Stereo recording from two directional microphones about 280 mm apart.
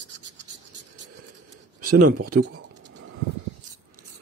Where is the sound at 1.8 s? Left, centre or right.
Right.